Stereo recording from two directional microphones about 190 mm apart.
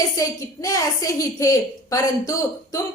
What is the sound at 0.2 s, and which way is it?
A woman's voice, 20° left (ahead or behind).